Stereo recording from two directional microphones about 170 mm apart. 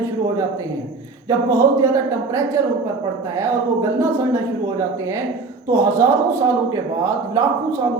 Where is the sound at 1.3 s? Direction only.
20° right (ahead or behind).